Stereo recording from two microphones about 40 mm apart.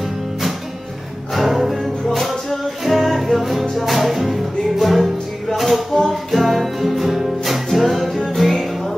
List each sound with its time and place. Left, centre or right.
0.0 s music: centre